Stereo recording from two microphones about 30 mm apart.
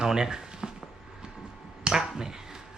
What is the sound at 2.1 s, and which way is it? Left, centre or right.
Speech, centre.